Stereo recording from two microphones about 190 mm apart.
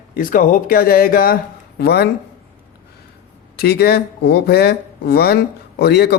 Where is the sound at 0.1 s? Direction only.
45° left (ahead or behind).